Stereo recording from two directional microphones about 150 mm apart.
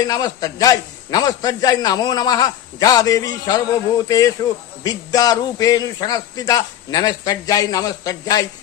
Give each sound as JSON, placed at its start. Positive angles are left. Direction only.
{"t": 0.0, "sound": "a man's voice", "side_deg": 25}